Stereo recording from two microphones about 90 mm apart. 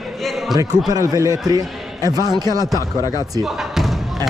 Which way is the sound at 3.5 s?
5° right (ahead or behind).